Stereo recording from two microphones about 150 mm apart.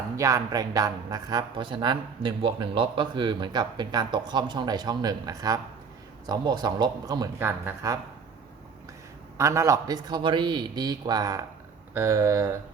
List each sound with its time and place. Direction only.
0.2 s speech: 20° right (ahead or behind)
9.4 s speech: 20° right (ahead or behind)